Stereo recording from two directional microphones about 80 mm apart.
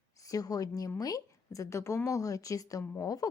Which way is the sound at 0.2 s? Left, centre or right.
Left.